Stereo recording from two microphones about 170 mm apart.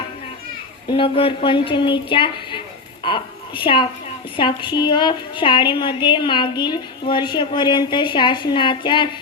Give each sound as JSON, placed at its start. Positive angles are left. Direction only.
{"t": 0.9, "sound": "a woman's voice", "side_deg": 30}